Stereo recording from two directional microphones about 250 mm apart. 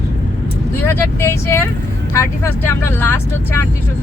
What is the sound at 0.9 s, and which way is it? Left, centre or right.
Speech, centre.